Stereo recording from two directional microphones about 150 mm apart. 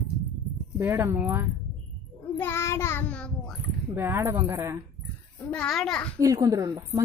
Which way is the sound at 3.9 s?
15° right (ahead or behind).